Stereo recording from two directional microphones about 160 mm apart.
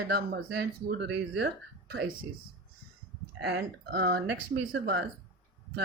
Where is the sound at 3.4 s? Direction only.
85° right.